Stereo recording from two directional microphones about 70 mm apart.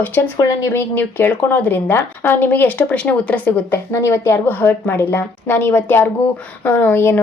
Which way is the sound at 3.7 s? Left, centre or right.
Left.